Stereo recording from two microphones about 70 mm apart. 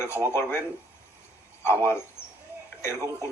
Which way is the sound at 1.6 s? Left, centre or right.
Left.